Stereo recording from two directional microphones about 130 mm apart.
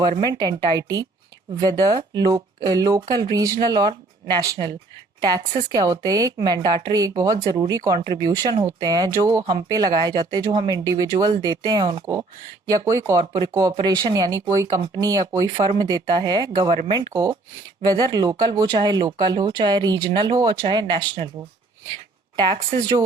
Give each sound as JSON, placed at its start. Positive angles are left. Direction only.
{"t": 0.3, "sound": "speech", "side_deg": -30}
{"t": 22.5, "sound": "speech", "side_deg": -35}